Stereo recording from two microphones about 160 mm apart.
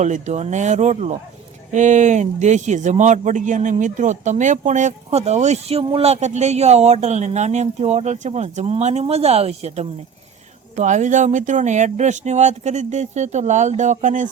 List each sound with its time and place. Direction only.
0.0 s speech: 45° right (ahead or behind)